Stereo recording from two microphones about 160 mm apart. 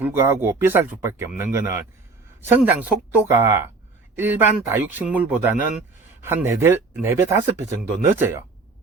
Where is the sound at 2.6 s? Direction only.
10° right (ahead or behind).